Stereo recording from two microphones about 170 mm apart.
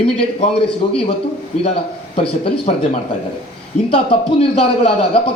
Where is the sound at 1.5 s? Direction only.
40° left (ahead or behind).